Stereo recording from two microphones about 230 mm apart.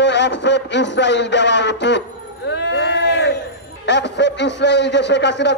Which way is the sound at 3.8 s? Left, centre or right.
Left.